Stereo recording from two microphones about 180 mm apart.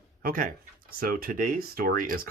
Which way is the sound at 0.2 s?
50° right (ahead or behind).